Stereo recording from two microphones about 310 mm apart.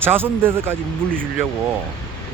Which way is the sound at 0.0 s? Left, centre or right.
Centre.